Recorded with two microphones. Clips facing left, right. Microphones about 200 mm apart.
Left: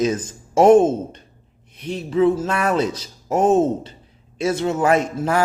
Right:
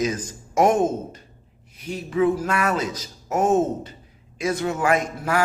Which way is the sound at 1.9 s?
30° left (ahead or behind).